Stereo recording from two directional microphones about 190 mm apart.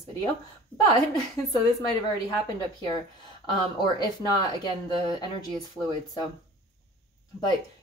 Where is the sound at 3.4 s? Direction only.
25° left (ahead or behind).